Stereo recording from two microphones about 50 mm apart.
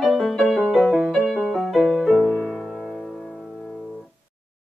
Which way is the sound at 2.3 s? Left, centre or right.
Centre.